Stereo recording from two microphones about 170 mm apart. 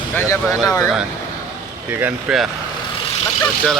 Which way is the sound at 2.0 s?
5° right (ahead or behind).